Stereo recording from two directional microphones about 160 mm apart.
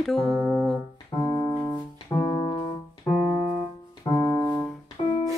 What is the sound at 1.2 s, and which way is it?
Music, 10° left (ahead or behind).